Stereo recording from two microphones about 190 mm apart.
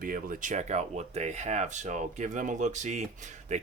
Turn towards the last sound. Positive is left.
turn(degrees=-35)  # may be behind; listen again after turning